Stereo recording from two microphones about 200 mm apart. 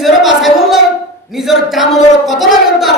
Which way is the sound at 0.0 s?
Centre (ahead or behind).